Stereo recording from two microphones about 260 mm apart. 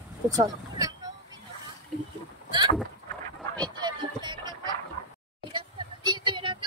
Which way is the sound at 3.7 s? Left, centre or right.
Centre.